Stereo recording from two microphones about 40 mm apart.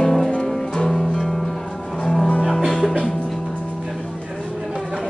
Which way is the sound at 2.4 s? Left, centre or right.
Right.